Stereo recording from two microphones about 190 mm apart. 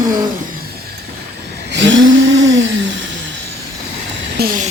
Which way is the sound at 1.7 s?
75° right (ahead or behind).